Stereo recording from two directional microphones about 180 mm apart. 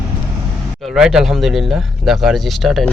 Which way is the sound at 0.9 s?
5° right (ahead or behind).